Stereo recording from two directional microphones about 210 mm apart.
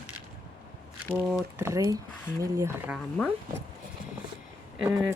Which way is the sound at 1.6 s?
15° right (ahead or behind).